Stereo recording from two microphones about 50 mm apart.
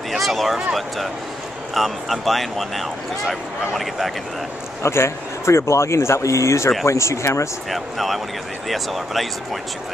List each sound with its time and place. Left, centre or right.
0.1 s speech: centre
1.7 s speech: centre
4.8 s speech: left
7.7 s speech: centre